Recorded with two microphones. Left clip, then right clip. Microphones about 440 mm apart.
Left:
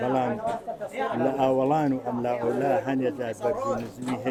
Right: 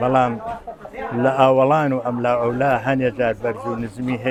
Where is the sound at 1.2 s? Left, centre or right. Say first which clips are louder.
Right 10 dB; right.